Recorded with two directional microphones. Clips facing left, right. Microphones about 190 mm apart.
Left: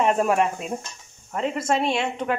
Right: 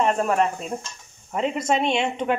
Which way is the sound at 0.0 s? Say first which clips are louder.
Left 1 dB; 10° left (ahead or behind).